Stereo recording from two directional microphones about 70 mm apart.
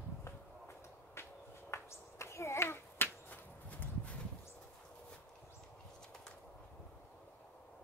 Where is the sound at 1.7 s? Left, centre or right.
Left.